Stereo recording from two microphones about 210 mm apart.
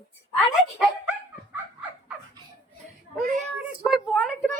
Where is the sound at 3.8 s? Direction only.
Centre (ahead or behind).